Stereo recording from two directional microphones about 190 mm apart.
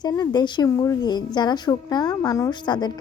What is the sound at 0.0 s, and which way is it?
Speech, 20° left (ahead or behind).